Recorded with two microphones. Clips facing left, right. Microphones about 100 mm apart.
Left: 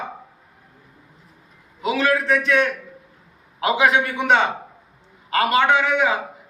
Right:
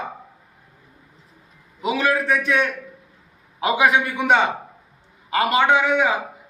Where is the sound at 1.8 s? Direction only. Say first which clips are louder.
Left 1 dB; 15° right (ahead or behind).